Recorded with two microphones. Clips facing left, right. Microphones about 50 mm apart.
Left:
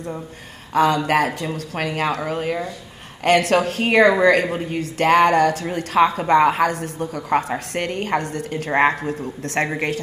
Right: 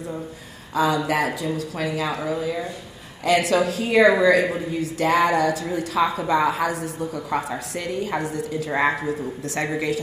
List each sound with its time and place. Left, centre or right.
0.7 s a woman's voice: left